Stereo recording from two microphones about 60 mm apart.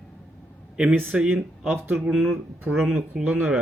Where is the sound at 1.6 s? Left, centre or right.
Right.